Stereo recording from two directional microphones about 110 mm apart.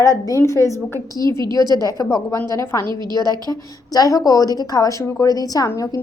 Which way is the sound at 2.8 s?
40° right (ahead or behind).